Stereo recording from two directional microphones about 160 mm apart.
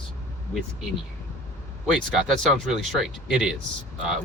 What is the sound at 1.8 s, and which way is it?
Speech, centre (ahead or behind).